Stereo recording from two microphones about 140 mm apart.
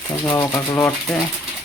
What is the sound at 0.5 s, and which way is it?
Speech, 20° left (ahead or behind).